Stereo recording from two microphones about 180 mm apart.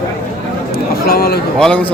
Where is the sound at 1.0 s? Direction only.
60° left (ahead or behind).